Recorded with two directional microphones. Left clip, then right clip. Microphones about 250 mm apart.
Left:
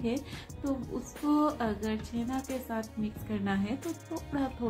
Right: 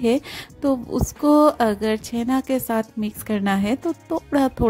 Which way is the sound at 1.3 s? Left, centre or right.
Right.